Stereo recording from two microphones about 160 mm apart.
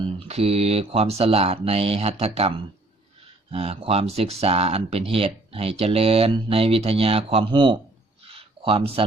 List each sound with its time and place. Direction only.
0.3 s speech: 40° right (ahead or behind)
3.5 s speech: 40° right (ahead or behind)
8.2 s a sound: 40° right (ahead or behind)